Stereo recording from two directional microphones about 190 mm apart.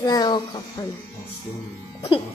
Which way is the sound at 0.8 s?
15° left (ahead or behind).